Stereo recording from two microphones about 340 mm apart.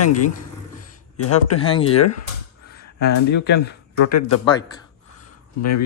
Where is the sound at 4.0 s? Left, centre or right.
Left.